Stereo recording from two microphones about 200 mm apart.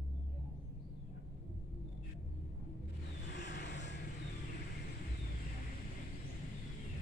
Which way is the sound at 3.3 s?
60° left (ahead or behind).